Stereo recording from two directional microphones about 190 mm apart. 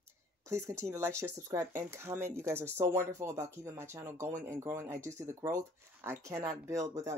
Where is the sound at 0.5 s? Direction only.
15° right (ahead or behind).